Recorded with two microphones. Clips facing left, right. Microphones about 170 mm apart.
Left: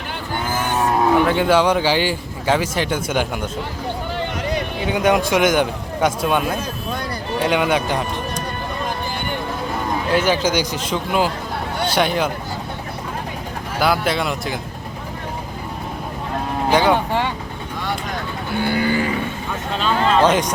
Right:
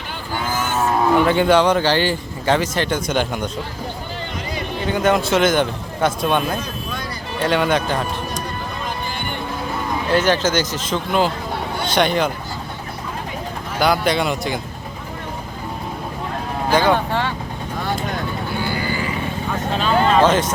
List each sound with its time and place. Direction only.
0.8 s speech: centre (ahead or behind)
4.9 s speech: 15° left (ahead or behind)
10.1 s speech: 10° left (ahead or behind)
13.7 s speech: 5° left (ahead or behind)
16.6 s vehicle: 15° left (ahead or behind)
18.6 s cattle: 60° left (ahead or behind)
20.2 s speech: 10° left (ahead or behind)